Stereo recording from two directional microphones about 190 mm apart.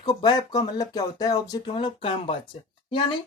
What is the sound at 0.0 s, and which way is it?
Speech, 20° left (ahead or behind).